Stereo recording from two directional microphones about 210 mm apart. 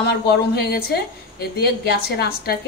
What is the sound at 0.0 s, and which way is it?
A woman's voice, 50° left (ahead or behind).